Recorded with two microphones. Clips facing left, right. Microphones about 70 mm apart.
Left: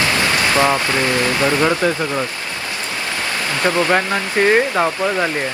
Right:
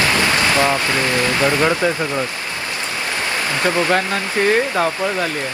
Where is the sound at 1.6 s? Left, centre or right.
Right.